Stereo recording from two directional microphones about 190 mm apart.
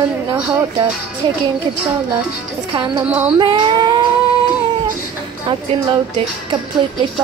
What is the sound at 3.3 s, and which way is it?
Child singing, 25° right (ahead or behind).